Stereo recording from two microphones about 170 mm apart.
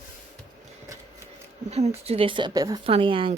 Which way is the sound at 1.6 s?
40° right (ahead or behind).